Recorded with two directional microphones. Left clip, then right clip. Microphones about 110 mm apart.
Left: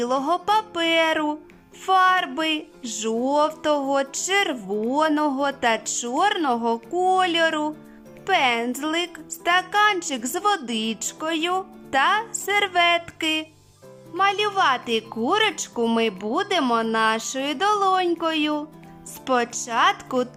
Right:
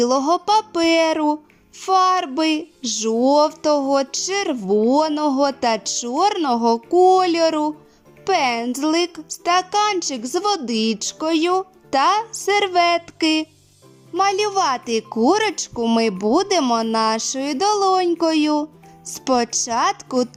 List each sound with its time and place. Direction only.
0.0 s speech: 35° right (ahead or behind)
2.8 s a woman's voice: 25° right (ahead or behind); by 20.2 s 45° right (ahead or behind)